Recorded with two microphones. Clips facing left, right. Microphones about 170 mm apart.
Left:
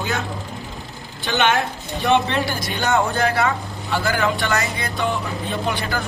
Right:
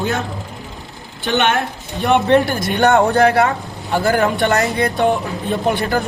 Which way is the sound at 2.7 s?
65° right (ahead or behind).